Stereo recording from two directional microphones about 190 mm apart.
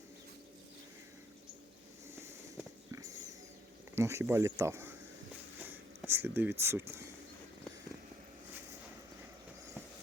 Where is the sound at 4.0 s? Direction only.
15° right (ahead or behind).